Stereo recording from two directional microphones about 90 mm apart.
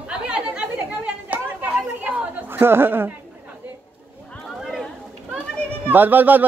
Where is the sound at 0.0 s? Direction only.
10° right (ahead or behind).